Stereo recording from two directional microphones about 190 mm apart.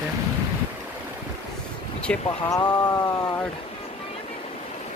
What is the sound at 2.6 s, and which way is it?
Speech, 20° left (ahead or behind).